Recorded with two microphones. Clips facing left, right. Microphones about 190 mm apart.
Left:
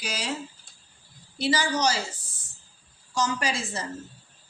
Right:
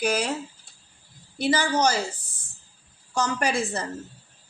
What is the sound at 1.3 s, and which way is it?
Speech, 55° right (ahead or behind).